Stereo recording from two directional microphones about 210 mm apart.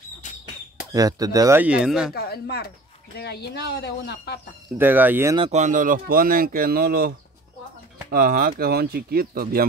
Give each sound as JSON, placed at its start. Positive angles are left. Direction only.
{"t": 0.9, "sound": "speech", "side_deg": -15}
{"t": 2.1, "sound": "speech", "side_deg": 50}
{"t": 4.7, "sound": "speech", "side_deg": -10}
{"t": 5.4, "sound": "speech", "side_deg": -35}